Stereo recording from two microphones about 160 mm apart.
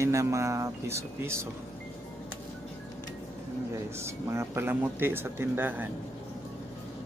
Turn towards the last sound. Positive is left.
turn(degrees=-10)  # may be behind; listen again after turning